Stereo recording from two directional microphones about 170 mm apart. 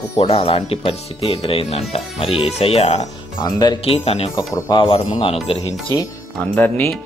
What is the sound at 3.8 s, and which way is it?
Speech, 35° left (ahead or behind).